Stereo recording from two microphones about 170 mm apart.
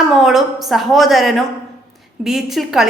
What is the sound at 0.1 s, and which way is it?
A woman's voice, centre (ahead or behind).